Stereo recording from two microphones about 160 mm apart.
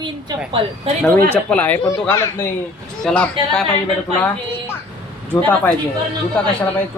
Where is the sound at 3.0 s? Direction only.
5° left (ahead or behind).